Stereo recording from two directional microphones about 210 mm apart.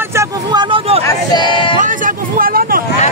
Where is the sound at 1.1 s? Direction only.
20° left (ahead or behind).